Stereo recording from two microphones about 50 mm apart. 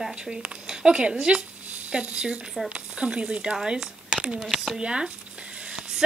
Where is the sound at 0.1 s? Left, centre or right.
Centre.